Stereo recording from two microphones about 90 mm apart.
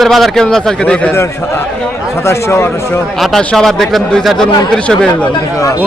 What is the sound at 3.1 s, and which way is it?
A man's voice, 5° left (ahead or behind).